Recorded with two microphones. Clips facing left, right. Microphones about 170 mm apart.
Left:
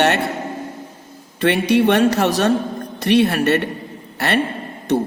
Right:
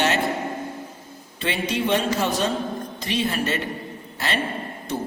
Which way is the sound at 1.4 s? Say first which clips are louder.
Left 9 dB; 70° left (ahead or behind).